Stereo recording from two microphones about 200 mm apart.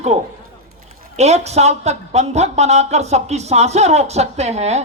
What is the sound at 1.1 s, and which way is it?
A woman's voice, 30° right (ahead or behind).